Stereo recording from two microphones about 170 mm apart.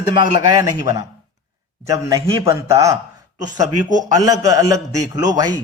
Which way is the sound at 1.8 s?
20° right (ahead or behind).